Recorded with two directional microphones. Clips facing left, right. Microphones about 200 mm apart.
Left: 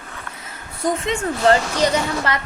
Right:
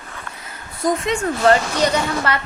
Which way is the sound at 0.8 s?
30° left (ahead or behind).